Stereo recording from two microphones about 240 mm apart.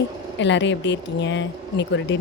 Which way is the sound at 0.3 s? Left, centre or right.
Left.